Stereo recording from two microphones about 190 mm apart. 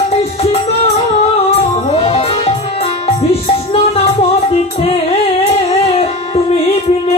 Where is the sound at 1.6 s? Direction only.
30° left (ahead or behind).